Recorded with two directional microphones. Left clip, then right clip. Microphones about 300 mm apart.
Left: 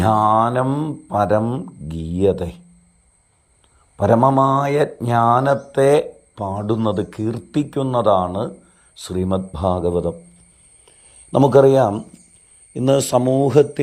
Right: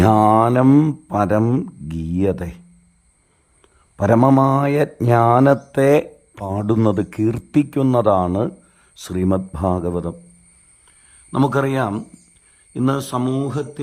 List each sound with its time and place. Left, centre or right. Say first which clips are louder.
0.1 s mantra: left 2 dB; right
1.1 s speech: left 1 dB; centre
3.9 s a man's voice: left 1 dB; centre
4.2 s speech: right 1 dB; right
9.2 s speech: right 1 dB; right
11.3 s speech: left 7 dB; centre
12.7 s a man's voice: left 5 dB; centre